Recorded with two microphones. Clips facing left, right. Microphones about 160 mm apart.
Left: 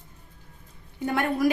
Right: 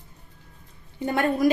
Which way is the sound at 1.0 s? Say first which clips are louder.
Right 2 dB; 25° right (ahead or behind).